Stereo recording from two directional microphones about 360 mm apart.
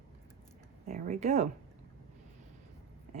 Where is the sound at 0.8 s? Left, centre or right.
Right.